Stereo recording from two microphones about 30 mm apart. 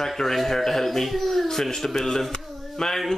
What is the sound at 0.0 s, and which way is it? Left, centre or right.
Speech, centre.